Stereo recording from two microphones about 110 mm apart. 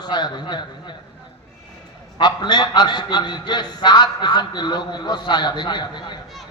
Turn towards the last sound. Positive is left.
turn(degrees=45)  # may be behind; listen again after turning